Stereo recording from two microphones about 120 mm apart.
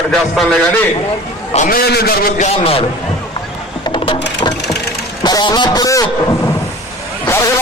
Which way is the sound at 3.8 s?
45° left (ahead or behind).